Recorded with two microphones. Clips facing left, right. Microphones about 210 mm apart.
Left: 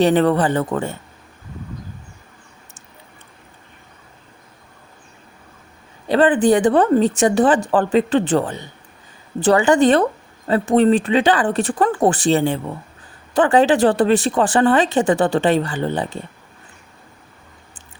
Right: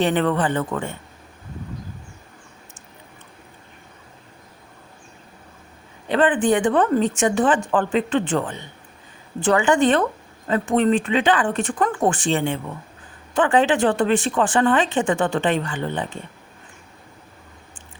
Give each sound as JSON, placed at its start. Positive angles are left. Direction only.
{"t": 0.0, "sound": "a woman's voice", "side_deg": 35}
{"t": 6.1, "sound": "a woman's voice", "side_deg": 35}